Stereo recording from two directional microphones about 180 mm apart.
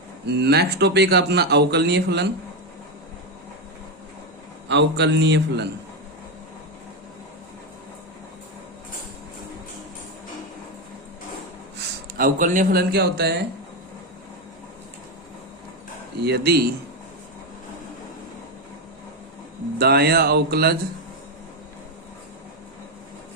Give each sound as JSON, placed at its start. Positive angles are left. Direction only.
{"t": 0.3, "sound": "speech", "side_deg": -65}
{"t": 4.7, "sound": "a man's voice", "side_deg": -75}
{"t": 11.8, "sound": "a sound", "side_deg": -55}
{"t": 12.9, "sound": "speech", "side_deg": -65}
{"t": 16.2, "sound": "speech", "side_deg": -65}
{"t": 19.8, "sound": "speech", "side_deg": -60}